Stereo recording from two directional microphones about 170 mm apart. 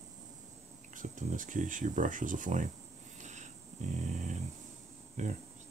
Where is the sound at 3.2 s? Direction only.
45° right (ahead or behind).